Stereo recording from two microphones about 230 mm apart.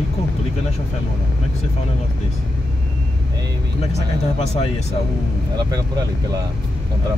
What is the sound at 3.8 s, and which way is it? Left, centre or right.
Speech, left.